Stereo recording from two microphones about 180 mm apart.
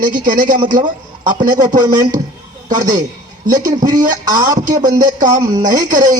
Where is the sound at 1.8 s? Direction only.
20° right (ahead or behind).